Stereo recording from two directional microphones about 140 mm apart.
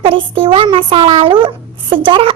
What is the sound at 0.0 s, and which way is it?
A child's voice, 40° right (ahead or behind).